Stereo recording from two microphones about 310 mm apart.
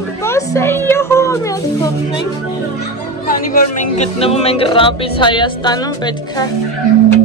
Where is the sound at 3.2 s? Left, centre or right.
Left.